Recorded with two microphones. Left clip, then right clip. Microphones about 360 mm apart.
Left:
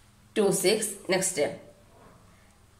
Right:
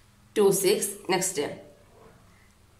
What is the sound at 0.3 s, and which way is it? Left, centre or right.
A woman's voice, centre.